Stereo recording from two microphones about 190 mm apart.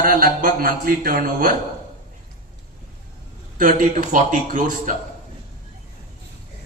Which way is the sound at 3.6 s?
45° right (ahead or behind).